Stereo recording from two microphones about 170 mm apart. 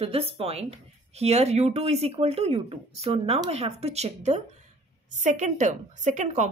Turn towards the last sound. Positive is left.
turn(degrees=-45)  # may be behind; listen again after turning